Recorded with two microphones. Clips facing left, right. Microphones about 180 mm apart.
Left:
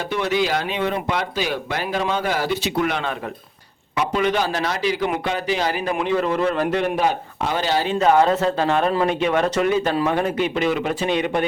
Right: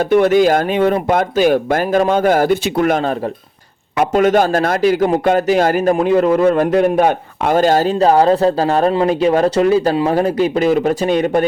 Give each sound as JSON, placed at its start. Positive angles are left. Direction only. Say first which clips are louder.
{"t": 0.0, "sound": "speech", "louder": "right 11 dB", "side_deg": -50}